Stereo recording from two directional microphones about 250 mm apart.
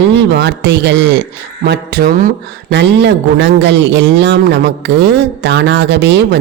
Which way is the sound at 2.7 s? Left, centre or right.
Right.